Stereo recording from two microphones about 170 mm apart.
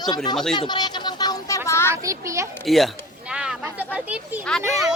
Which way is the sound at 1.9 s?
20° right (ahead or behind).